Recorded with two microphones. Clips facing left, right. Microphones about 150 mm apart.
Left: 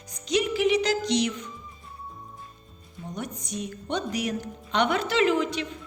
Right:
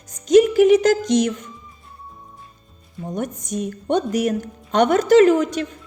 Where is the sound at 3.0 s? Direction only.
50° right (ahead or behind).